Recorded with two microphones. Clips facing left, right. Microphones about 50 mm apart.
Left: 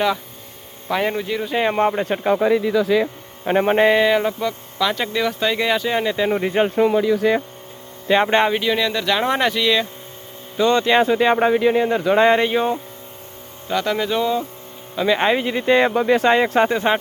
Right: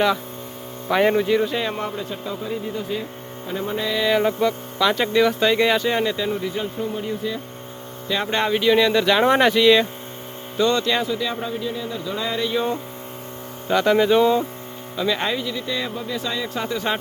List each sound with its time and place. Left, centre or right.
0.9 s speech: centre
1.5 s speech: left
4.1 s speech: centre
6.3 s speech: left
6.7 s speech: left
8.0 s speech: left
8.4 s speech: centre
8.7 s speech: centre
10.6 s speech: left
11.0 s speech: left
11.3 s speech: left
13.7 s speech: centre
14.9 s speech: left
15.4 s speech: left